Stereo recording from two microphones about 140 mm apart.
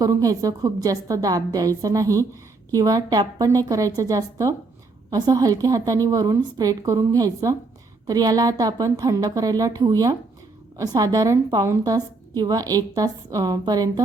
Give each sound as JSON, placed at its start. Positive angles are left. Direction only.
{"t": 0.0, "sound": "a woman's voice", "side_deg": -25}